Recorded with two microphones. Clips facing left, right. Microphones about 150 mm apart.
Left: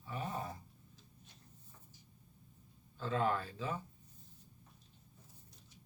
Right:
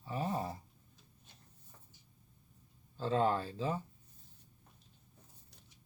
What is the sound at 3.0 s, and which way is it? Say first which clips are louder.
Speech: right 3 dB; 30° right (ahead or behind).